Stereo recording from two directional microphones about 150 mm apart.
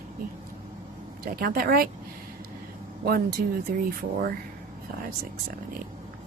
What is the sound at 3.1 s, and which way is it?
Speech, 90° right.